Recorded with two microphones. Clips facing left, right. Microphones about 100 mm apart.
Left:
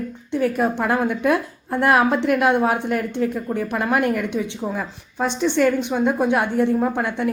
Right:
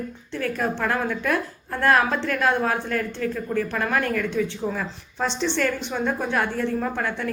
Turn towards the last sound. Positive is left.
turn(degrees=20)  # may be behind; listen again after turning